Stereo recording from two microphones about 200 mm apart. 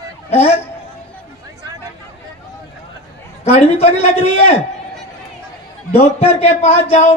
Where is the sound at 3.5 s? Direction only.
30° left (ahead or behind).